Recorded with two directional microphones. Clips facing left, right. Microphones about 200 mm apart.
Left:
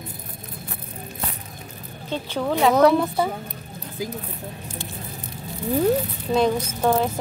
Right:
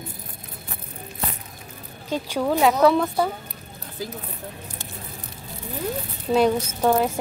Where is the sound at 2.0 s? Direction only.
10° right (ahead or behind).